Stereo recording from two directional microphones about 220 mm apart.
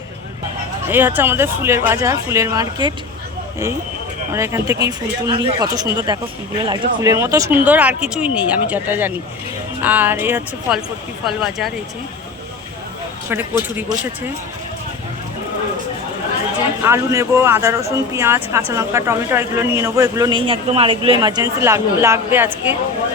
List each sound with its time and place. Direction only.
0.9 s a man's voice: 10° right (ahead or behind)
4.4 s a man's voice: 10° right (ahead or behind)
13.3 s a man's voice: 10° right (ahead or behind)
16.8 s a man's voice: 10° right (ahead or behind)